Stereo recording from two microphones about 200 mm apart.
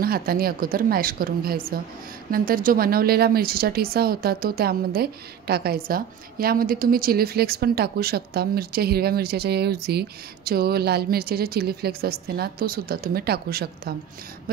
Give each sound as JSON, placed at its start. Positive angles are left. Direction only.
{"t": 0.0, "sound": "a woman's voice", "side_deg": -50}